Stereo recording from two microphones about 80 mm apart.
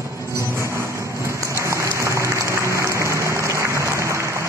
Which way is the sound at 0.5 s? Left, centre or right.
Right.